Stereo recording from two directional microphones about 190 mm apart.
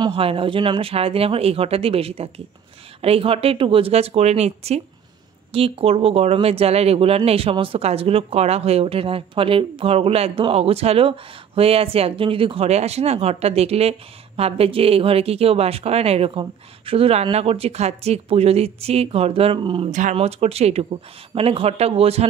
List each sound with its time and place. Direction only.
0.0 s speech: 30° right (ahead or behind)
19.9 s speech: 40° right (ahead or behind)